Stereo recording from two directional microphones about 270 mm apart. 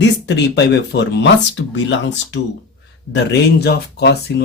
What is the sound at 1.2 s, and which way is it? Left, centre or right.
Speech, left.